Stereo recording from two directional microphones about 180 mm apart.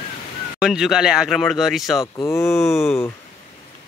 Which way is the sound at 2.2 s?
15° left (ahead or behind).